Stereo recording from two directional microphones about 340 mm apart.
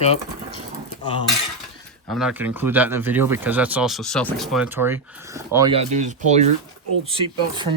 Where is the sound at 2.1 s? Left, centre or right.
Centre.